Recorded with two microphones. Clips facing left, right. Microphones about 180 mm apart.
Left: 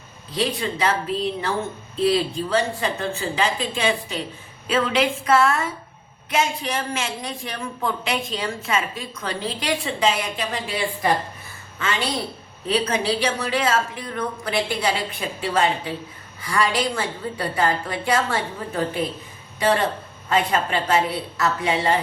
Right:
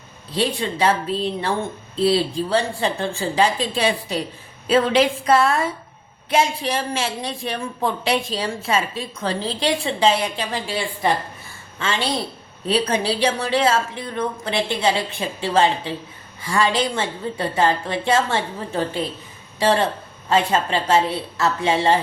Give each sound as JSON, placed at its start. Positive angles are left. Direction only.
{"t": 0.3, "sound": "a woman's voice", "side_deg": -30}